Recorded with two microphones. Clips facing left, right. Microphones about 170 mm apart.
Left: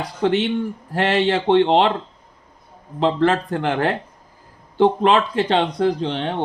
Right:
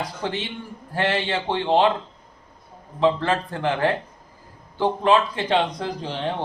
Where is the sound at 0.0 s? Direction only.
70° left (ahead or behind).